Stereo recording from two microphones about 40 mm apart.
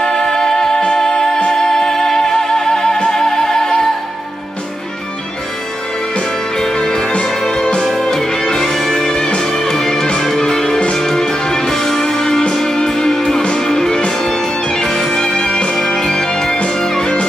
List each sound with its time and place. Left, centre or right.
0.0 s music: centre
6.6 s music: centre
9.1 s music: centre